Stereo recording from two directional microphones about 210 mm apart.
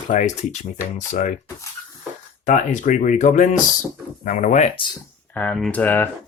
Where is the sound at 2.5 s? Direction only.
35° left (ahead or behind).